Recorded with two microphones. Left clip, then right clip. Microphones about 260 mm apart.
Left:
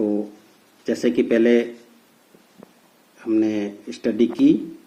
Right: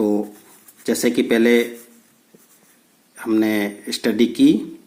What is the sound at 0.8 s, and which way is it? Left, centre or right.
Speech, right.